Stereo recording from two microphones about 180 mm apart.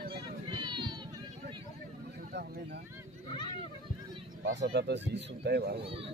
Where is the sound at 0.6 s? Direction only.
25° right (ahead or behind).